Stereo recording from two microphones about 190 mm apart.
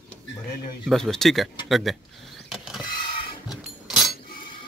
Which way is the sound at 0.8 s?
Centre (ahead or behind).